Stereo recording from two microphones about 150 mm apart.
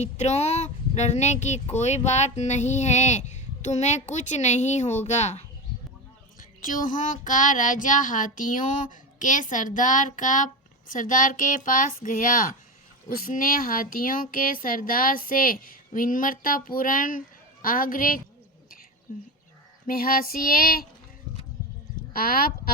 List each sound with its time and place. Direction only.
0.0 s speech: 50° left (ahead or behind)
6.6 s speech: 65° left (ahead or behind)
19.9 s speech: 75° left (ahead or behind)
22.1 s speech: 80° left